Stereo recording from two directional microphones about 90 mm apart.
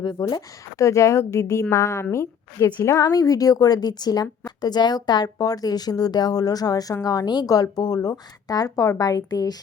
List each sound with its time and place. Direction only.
0.0 s a woman's voice: 50° left (ahead or behind)
0.8 s a woman's voice: 35° left (ahead or behind)
3.0 s a woman's voice: 40° left (ahead or behind)